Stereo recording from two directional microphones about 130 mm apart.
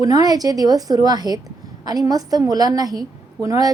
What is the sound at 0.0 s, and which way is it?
A woman's voice, 30° right (ahead or behind).